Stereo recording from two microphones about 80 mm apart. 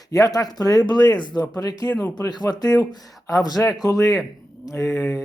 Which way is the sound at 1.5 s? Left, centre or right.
Left.